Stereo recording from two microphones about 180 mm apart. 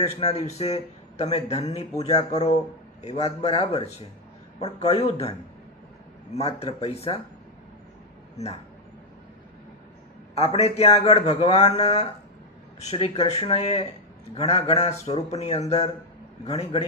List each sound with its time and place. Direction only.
0.0 s speech: 35° left (ahead or behind)
10.3 s speech: 35° left (ahead or behind)